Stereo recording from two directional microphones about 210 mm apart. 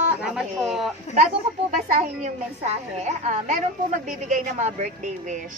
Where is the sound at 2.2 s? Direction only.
35° right (ahead or behind).